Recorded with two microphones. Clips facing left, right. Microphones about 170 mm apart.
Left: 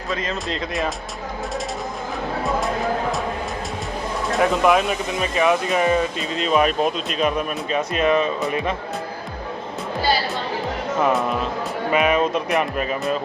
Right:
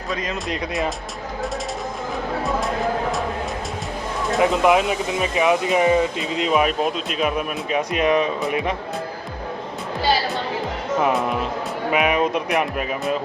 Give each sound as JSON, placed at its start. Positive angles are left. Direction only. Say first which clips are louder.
{"t": 4.4, "sound": "speech", "louder": "right 1 dB", "side_deg": -20}
{"t": 11.9, "sound": "speech", "louder": "left 1 dB", "side_deg": -10}